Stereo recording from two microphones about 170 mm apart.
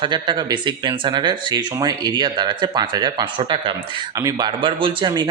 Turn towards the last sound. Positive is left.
turn(degrees=-25)  # may be behind; listen again after turning